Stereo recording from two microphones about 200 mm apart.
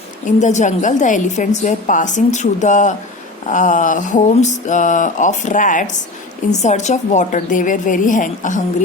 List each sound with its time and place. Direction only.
0.3 s a woman's voice: 35° left (ahead or behind)